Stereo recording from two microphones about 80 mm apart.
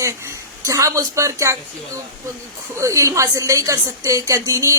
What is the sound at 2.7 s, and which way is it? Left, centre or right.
A woman's voice, right.